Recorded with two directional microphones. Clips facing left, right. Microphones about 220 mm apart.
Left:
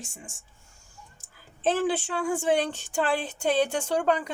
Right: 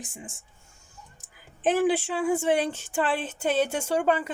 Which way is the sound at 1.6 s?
15° right (ahead or behind).